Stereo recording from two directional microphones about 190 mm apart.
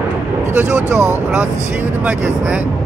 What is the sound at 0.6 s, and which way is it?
Speech, 5° right (ahead or behind).